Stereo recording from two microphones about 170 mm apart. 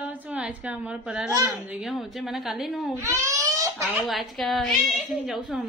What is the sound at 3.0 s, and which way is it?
Crying, 20° right (ahead or behind).